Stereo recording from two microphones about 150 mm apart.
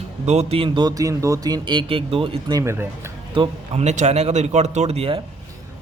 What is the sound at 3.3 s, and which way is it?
Speech, 45° right (ahead or behind).